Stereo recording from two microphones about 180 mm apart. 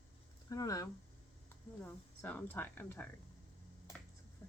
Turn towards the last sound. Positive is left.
turn(degrees=10)  # may be behind; listen again after turning